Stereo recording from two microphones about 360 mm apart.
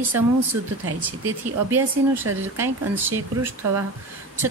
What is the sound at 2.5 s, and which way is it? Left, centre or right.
Speech, centre.